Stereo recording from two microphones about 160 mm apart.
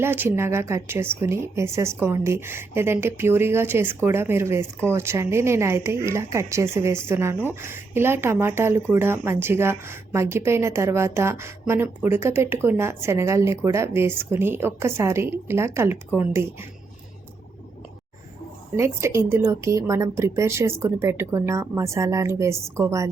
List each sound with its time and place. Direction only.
0.0 s a woman's voice: 15° right (ahead or behind)
18.8 s a woman's voice: 15° right (ahead or behind)